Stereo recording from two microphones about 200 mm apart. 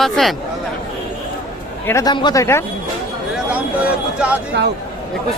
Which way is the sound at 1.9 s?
15° left (ahead or behind).